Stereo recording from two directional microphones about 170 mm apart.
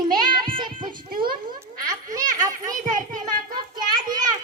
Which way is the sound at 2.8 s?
50° right (ahead or behind).